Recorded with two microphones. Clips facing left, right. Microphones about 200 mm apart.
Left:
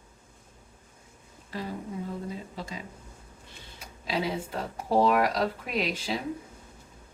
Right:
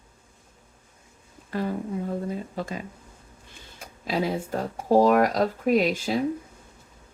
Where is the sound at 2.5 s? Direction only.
55° right (ahead or behind).